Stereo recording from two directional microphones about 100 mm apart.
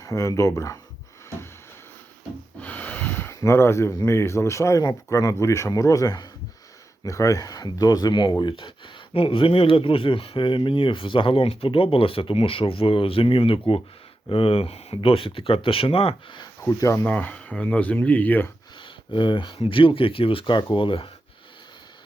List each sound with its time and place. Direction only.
0.0 s speech: 35° left (ahead or behind)
2.6 s gasp: 15° left (ahead or behind)
4.0 s speech: 25° left (ahead or behind); by 16.4 s 75° left (ahead or behind)
16.4 s speech: 35° left (ahead or behind)
17.1 s speech: 15° left (ahead or behind)
18.8 s a sound: 55° left (ahead or behind)
19.5 s speech: 65° left (ahead or behind)